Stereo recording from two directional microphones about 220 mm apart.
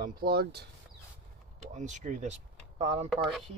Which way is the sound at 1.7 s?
35° right (ahead or behind).